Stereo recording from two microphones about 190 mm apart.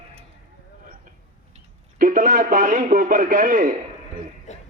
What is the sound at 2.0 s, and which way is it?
A man's voice, 45° right (ahead or behind).